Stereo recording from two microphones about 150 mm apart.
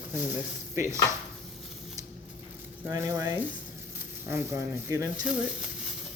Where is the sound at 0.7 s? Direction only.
20° right (ahead or behind).